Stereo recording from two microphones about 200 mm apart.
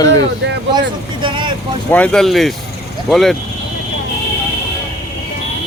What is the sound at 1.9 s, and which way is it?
Speech, 5° left (ahead or behind).